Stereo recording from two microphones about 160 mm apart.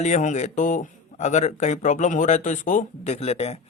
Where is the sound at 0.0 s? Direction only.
50° left (ahead or behind).